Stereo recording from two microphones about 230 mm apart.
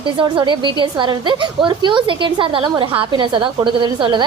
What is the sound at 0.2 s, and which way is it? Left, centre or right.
A woman's voice, centre.